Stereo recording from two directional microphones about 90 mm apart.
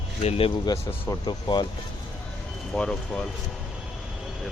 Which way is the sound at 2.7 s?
10° left (ahead or behind).